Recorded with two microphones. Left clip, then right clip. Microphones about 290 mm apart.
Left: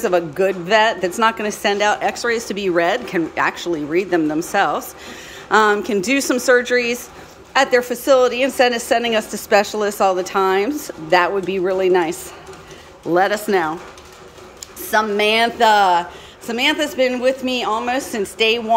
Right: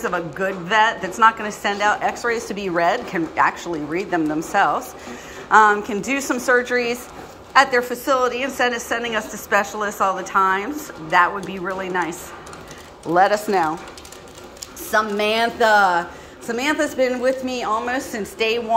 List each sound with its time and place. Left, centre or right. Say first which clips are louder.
0.0 s a woman's voice: left 6 dB; centre
14.9 s a woman's voice: left 3 dB; centre